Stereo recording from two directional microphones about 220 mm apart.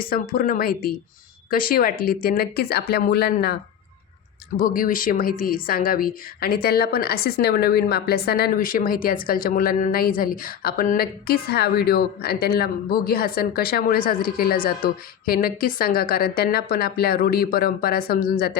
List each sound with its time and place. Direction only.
0.1 s a woman's voice: 40° left (ahead or behind)